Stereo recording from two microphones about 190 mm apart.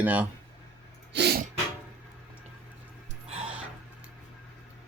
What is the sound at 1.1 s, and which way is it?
Music, 60° right (ahead or behind).